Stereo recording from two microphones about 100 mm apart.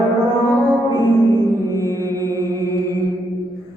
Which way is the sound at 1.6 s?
30° right (ahead or behind).